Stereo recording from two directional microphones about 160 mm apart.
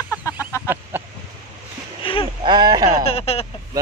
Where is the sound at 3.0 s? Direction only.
40° left (ahead or behind).